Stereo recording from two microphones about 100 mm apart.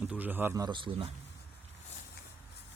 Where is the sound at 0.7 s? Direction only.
55° right (ahead or behind).